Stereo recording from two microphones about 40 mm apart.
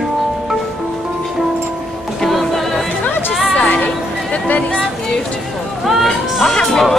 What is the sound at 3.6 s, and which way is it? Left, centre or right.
Music, left.